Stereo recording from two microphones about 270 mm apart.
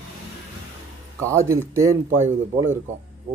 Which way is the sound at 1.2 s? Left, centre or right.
Centre.